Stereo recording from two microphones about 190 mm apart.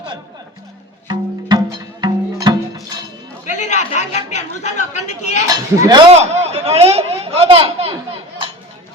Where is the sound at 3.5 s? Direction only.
40° left (ahead or behind).